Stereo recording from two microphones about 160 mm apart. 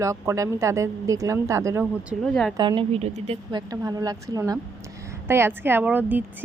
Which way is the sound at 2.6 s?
30° right (ahead or behind).